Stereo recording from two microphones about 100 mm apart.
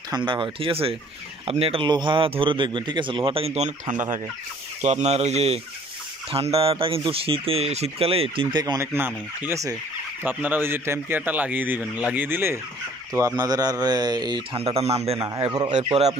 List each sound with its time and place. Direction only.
0.1 s a man's voice: 55° right (ahead or behind); by 1.9 s 70° right (ahead or behind)
1.9 s a man's voice: 50° right (ahead or behind); by 3.9 s 80° right
5.0 s speech: 90° right
6.3 s speech: 75° right (ahead or behind); by 8.7 s 50° right (ahead or behind)
8.7 s a man's voice: 20° right (ahead or behind)
13.1 s speech: 35° right (ahead or behind)
14.5 s speech: 75° right (ahead or behind)
15.1 s speech: 35° right (ahead or behind)
15.4 s speech: 50° right (ahead or behind)